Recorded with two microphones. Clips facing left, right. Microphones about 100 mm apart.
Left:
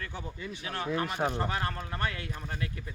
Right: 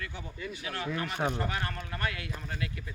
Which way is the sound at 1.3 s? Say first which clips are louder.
Left 2 dB; 30° left (ahead or behind).